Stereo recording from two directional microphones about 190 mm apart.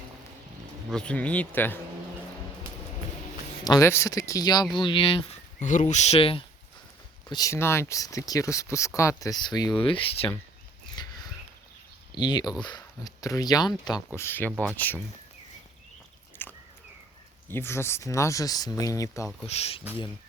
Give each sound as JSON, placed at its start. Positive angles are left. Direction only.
{"t": 0.9, "sound": "speech", "side_deg": 5}
{"t": 3.6, "sound": "speech", "side_deg": 20}
{"t": 7.3, "sound": "speech", "side_deg": 20}
{"t": 11.0, "sound": "a sound", "side_deg": 20}
{"t": 12.1, "sound": "speech", "side_deg": 25}
{"t": 14.2, "sound": "speech", "side_deg": 10}
{"t": 16.4, "sound": "a sound", "side_deg": 10}
{"t": 17.5, "sound": "speech", "side_deg": 10}
{"t": 19.5, "sound": "speech", "side_deg": 35}